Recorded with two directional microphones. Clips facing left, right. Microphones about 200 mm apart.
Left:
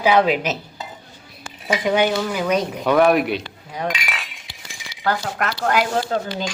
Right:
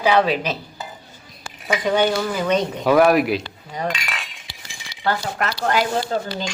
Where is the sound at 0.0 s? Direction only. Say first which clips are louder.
Left 1 dB; 10° left (ahead or behind).